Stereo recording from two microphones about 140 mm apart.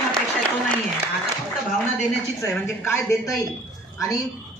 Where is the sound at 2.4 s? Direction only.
20° left (ahead or behind).